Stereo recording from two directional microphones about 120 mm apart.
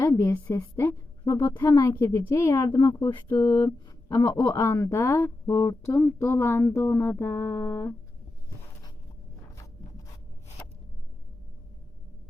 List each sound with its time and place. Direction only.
0.0 s a woman's voice: 25° left (ahead or behind)